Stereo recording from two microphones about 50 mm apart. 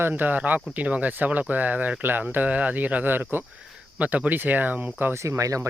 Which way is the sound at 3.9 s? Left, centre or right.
Right.